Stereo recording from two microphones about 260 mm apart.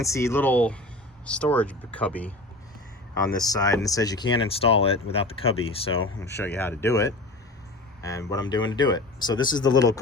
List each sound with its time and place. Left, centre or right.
0.0 s speech: centre
3.4 s speech: centre
6.2 s speech: centre
8.3 s speech: centre